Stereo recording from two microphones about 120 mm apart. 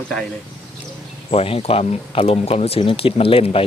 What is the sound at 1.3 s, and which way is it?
Speech, 55° left (ahead or behind).